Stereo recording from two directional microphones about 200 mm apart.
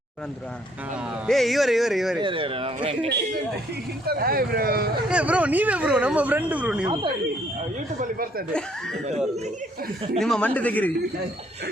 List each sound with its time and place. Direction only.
1.3 s speech: centre (ahead or behind)
2.1 s speech: 25° right (ahead or behind)
4.0 s speech: 50° right (ahead or behind)
5.0 s speech: 5° right (ahead or behind)
7.9 s speech: 45° right (ahead or behind)
10.2 s speech: 5° left (ahead or behind)